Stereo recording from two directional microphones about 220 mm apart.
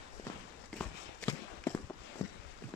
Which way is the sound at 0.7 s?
10° left (ahead or behind).